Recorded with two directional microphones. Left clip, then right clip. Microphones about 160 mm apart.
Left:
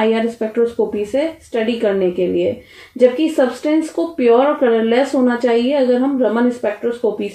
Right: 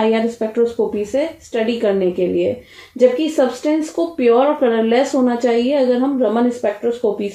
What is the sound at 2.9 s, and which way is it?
A woman's voice, 40° left (ahead or behind).